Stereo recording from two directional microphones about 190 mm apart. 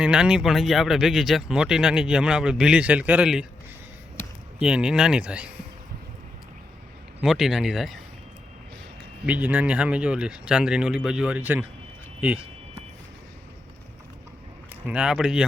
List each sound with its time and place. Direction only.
0.0 s speech: 5° right (ahead or behind)
4.6 s speech: 5° right (ahead or behind)
7.2 s speech: centre (ahead or behind)
9.2 s speech: 5° right (ahead or behind)
14.8 s speech: 5° right (ahead or behind)